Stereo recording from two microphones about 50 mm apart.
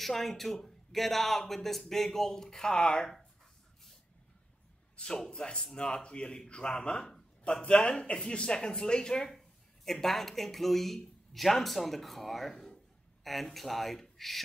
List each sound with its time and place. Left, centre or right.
0.0 s a man's voice: centre
4.9 s a sound: centre
5.3 s a man's voice: centre